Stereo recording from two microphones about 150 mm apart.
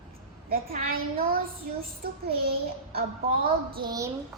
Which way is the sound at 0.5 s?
75° right (ahead or behind).